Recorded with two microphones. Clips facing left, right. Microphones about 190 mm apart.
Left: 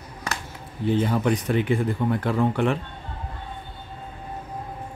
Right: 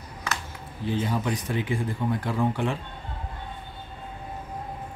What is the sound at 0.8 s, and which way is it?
Speech, 60° left (ahead or behind).